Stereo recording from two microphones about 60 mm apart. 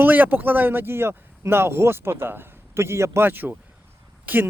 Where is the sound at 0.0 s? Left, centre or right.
Right.